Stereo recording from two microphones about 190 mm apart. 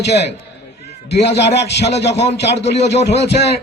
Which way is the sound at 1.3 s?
60° left (ahead or behind).